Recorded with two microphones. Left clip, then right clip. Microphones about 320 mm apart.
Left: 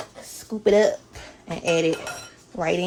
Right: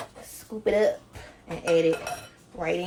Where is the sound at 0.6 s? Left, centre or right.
Left.